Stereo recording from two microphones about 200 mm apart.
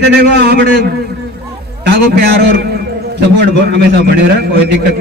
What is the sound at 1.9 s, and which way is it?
Speech, 50° right (ahead or behind).